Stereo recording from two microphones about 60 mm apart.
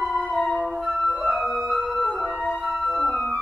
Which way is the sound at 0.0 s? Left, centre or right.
Centre.